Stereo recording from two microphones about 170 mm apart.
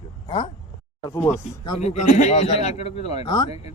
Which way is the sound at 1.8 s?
40° left (ahead or behind).